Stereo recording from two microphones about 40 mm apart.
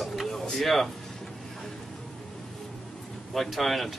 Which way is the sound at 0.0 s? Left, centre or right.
Centre.